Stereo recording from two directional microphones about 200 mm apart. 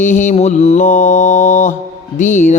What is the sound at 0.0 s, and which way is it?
Mantra, 40° left (ahead or behind).